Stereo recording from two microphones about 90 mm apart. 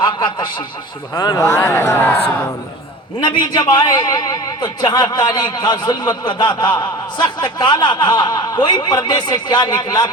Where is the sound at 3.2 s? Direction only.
55° left (ahead or behind).